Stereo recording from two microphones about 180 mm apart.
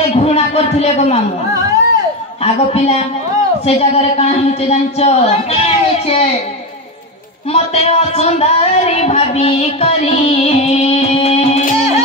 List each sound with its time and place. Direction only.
0.1 s a sound: 35° left (ahead or behind)
2.4 s speech: 35° left (ahead or behind)
7.5 s speech: 35° left (ahead or behind)